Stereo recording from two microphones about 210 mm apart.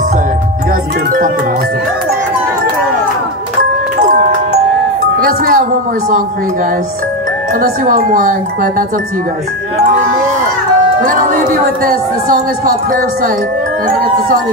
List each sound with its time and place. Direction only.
5.2 s music: 40° right (ahead or behind)
7.6 s speech: 40° right (ahead or behind)
11.1 s speech: 40° right (ahead or behind)